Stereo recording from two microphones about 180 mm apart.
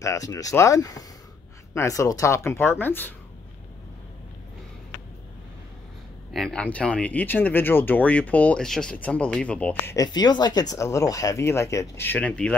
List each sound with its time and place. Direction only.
0.0 s speech: 20° left (ahead or behind)
6.3 s speech: 5° left (ahead or behind)
9.9 s speech: 25° left (ahead or behind); by 12.5 s 5° left (ahead or behind)